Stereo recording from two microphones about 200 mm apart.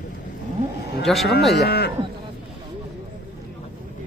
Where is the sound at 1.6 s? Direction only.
55° left (ahead or behind).